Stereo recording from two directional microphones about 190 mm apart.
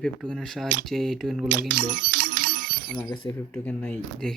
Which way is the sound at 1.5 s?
50° right (ahead or behind).